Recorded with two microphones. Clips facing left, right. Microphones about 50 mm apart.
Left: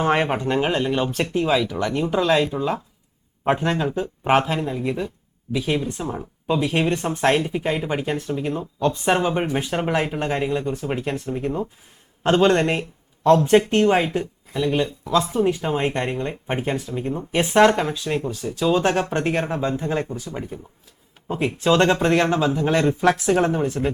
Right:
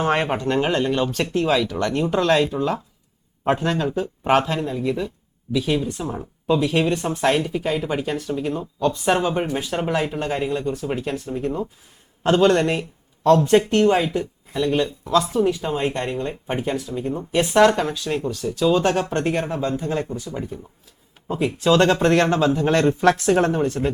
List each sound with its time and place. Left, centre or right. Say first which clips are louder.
0.5 s speech: right 2 dB; centre
4.8 s speech: right 1 dB; left
6.1 s speech: right 2 dB; centre
6.6 s speech: left 2 dB; left
14.6 s speech: right 1 dB; centre
15.5 s speech: left 1 dB; left
23.6 s speech: right 1 dB; centre